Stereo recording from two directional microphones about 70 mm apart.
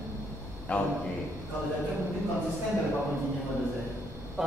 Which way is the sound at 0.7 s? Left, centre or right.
Left.